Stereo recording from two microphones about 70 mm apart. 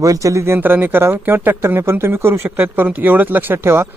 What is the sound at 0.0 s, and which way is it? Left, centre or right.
Speech, right.